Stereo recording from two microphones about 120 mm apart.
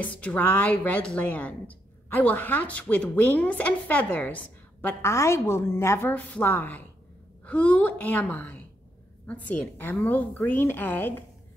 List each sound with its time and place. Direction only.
0.0 s speech: 10° left (ahead or behind)
4.8 s a woman's voice: 25° left (ahead or behind)